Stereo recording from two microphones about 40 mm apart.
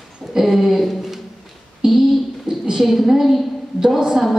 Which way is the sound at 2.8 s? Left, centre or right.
Centre.